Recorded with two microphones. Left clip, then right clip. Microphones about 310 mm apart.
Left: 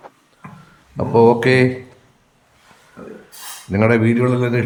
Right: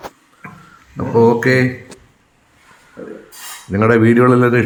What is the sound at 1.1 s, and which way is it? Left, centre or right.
Speech, centre.